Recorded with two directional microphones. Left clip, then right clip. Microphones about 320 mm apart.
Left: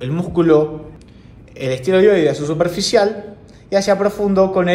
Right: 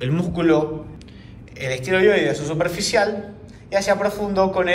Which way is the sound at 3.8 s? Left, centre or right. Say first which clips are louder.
Left 3 dB; centre.